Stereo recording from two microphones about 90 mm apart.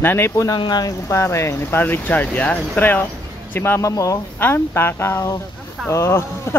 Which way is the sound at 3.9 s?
40° left (ahead or behind).